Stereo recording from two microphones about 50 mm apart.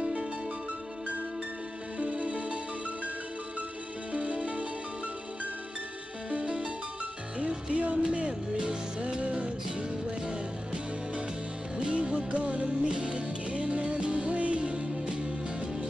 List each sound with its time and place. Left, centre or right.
0.0 s music: centre
2.0 s music: right
4.1 s music: right
6.3 s music: centre